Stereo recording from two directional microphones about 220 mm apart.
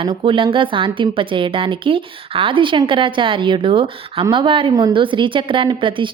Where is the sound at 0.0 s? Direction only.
25° right (ahead or behind).